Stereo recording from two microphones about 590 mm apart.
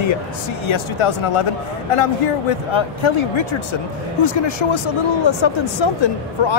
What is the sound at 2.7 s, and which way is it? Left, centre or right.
Speech, left.